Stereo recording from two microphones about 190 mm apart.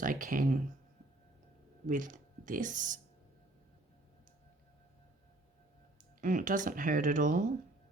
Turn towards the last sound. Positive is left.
turn(degrees=-45)  # may be behind; listen again after turning